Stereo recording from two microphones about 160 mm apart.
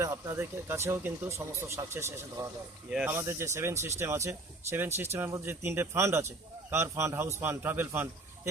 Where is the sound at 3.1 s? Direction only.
15° right (ahead or behind).